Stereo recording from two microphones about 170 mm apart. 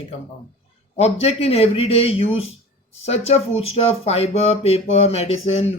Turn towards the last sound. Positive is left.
turn(degrees=35)  # may be behind; listen again after turning